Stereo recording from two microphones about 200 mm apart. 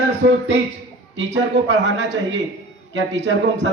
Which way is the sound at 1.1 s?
65° right (ahead or behind).